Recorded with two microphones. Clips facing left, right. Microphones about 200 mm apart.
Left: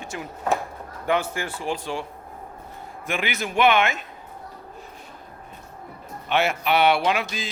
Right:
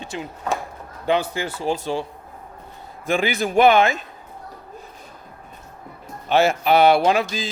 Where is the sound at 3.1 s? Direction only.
35° right (ahead or behind).